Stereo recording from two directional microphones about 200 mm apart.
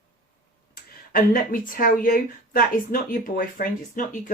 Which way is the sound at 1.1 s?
45° left (ahead or behind).